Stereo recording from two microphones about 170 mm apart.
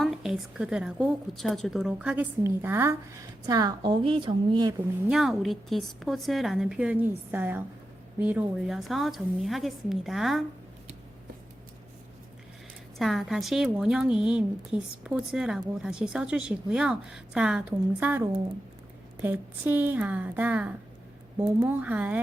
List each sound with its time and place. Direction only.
0.0 s a woman's voice: 5° right (ahead or behind); by 4.7 s 25° right (ahead or behind)
5.0 s a woman's voice: centre (ahead or behind)
13.0 s a woman's voice: centre (ahead or behind)